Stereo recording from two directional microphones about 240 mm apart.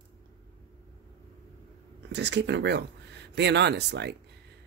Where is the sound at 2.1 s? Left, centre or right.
Right.